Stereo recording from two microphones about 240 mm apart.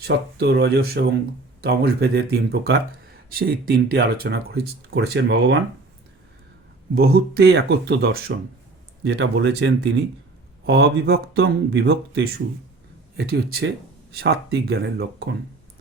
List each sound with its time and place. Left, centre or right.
0.0 s speech: right
6.9 s speech: right